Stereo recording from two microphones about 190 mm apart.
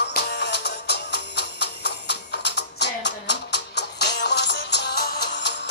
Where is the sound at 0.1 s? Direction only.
60° left (ahead or behind).